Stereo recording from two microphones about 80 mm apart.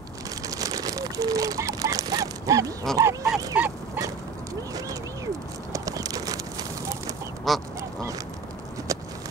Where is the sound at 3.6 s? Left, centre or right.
Right.